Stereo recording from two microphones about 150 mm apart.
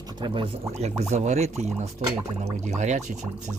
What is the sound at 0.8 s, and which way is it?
Speech, 45° right (ahead or behind).